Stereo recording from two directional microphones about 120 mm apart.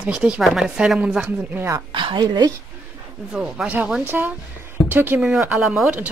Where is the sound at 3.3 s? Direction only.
10° right (ahead or behind).